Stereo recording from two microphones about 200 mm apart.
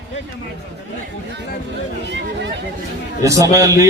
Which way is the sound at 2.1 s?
60° right (ahead or behind).